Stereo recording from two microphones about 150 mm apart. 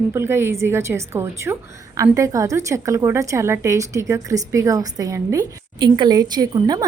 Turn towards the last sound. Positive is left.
turn(degrees=-25)  # may be behind; listen again after turning